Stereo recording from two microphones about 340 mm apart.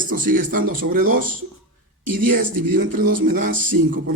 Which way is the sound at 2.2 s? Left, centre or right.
Right.